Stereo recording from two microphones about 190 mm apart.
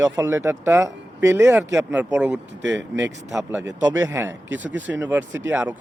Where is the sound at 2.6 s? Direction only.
70° right (ahead or behind).